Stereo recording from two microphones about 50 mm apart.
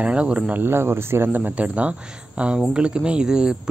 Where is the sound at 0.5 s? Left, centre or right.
Right.